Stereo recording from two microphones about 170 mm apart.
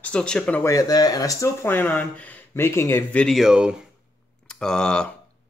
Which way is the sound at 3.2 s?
Centre (ahead or behind).